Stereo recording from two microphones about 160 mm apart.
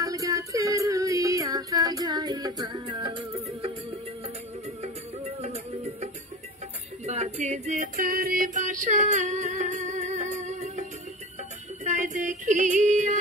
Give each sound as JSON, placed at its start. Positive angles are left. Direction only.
{"t": 0.0, "sound": "music", "side_deg": -20}
{"t": 4.8, "sound": "music", "side_deg": -45}
{"t": 7.1, "sound": "music", "side_deg": -45}
{"t": 11.8, "sound": "female singing", "side_deg": -50}